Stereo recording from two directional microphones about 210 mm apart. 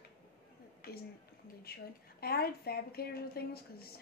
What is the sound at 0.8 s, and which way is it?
A woman's voice, 45° left (ahead or behind).